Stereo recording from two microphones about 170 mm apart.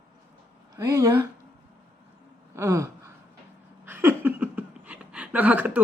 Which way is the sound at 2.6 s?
15° right (ahead or behind).